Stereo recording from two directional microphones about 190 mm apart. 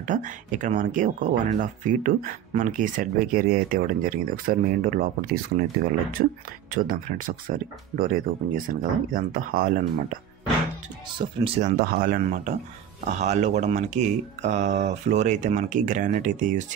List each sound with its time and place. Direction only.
0.0 s speech: 40° right (ahead or behind)
11.1 s speech: 30° right (ahead or behind)
11.8 s speech: 45° right (ahead or behind)